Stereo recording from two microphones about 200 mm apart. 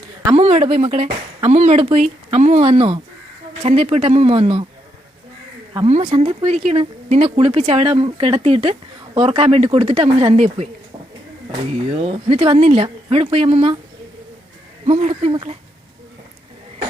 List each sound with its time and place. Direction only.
0.3 s speech: 30° right (ahead or behind)
5.8 s speech: 30° right (ahead or behind)
11.9 s speech: 30° right (ahead or behind)
14.8 s speech: 35° right (ahead or behind)